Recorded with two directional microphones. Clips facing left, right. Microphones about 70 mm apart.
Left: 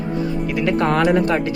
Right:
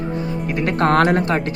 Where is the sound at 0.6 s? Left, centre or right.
Right.